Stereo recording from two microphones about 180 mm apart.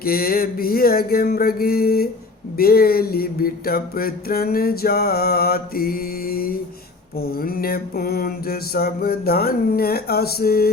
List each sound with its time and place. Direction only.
0.0 s mantra: 55° left (ahead or behind)